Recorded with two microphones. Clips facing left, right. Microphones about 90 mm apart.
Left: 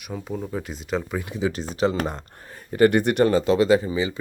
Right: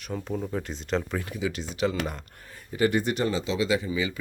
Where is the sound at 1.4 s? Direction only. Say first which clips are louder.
Left 6 dB; 35° left (ahead or behind).